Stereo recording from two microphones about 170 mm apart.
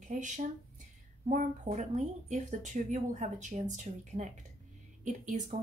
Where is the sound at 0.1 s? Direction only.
45° right (ahead or behind).